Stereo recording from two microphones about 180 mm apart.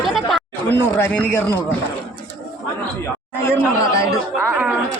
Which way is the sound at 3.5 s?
15° left (ahead or behind).